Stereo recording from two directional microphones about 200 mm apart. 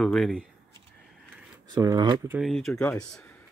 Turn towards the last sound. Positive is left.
turn(degrees=5)  # may be behind; listen again after turning